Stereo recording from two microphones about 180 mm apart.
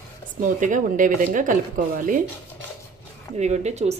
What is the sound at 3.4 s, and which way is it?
Speech, 40° right (ahead or behind).